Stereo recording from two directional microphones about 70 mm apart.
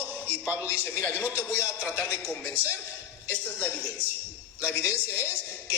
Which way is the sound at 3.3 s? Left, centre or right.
Left.